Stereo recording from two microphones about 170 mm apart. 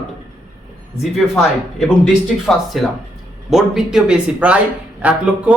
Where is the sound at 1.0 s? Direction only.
Centre (ahead or behind).